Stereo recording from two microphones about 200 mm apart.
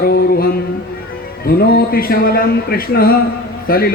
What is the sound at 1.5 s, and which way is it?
A man's voice, 50° left (ahead or behind).